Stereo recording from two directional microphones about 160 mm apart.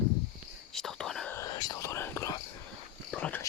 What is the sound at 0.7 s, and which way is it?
Whispering, 5° left (ahead or behind).